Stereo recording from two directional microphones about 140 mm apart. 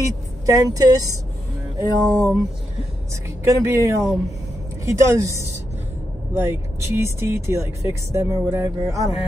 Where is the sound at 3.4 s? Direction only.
20° right (ahead or behind).